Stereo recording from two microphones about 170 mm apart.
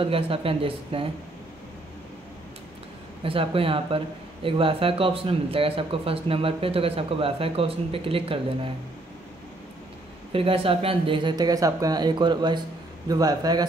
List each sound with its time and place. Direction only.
0.0 s speech: 35° right (ahead or behind)
3.3 s speech: 35° right (ahead or behind)
10.3 s speech: 35° right (ahead or behind)